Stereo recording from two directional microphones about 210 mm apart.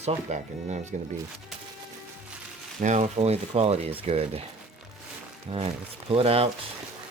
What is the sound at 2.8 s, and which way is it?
Speech, 35° right (ahead or behind).